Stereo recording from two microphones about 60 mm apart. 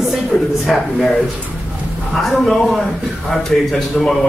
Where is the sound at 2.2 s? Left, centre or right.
Centre.